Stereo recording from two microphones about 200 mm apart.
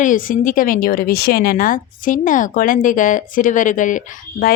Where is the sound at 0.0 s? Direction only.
40° left (ahead or behind).